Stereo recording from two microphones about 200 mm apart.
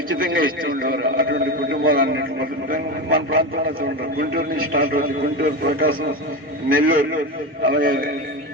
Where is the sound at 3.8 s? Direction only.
50° right (ahead or behind).